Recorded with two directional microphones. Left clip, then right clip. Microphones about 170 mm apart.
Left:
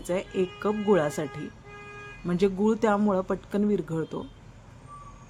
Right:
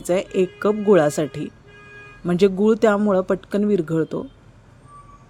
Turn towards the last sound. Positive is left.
turn(degrees=-35)  # may be behind; listen again after turning